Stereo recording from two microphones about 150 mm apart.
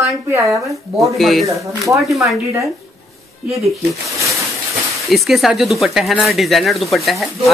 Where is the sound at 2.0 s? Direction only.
Centre (ahead or behind).